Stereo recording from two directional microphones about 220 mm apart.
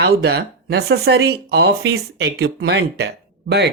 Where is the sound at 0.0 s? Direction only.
50° right (ahead or behind).